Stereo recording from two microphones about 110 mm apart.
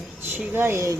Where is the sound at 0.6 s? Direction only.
25° right (ahead or behind).